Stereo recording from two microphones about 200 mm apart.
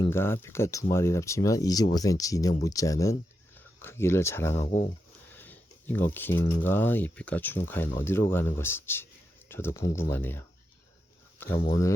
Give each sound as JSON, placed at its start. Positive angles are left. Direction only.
{"t": 0.0, "sound": "speech", "side_deg": 10}
{"t": 4.6, "sound": "speech", "side_deg": 30}
{"t": 5.3, "sound": "speech", "side_deg": 10}